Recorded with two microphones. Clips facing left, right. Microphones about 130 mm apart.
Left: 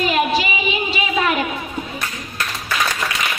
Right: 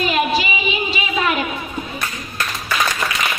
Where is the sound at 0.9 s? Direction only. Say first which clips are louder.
Left 2 dB; 50° left (ahead or behind).